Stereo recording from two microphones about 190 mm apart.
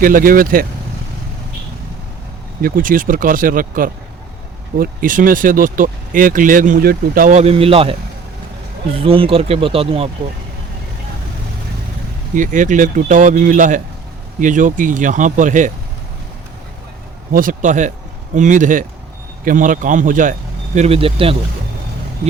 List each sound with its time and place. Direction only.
0.0 s speech: 45° right (ahead or behind)
2.6 s speech: 50° right (ahead or behind); by 7.9 s 30° right (ahead or behind)
9.0 s speech: 30° right (ahead or behind)
12.3 s speech: 45° right (ahead or behind)
17.3 s a man's voice: 45° right (ahead or behind)
20.7 s a man's voice: 35° right (ahead or behind)